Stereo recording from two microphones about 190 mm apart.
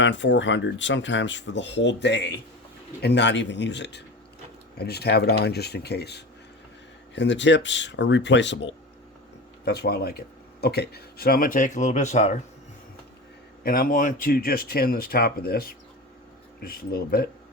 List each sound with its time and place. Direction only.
0.0 s speech: 70° left (ahead or behind)
9.6 s speech: 55° left (ahead or behind); by 12.4 s 40° left (ahead or behind)
13.7 s speech: 45° left (ahead or behind)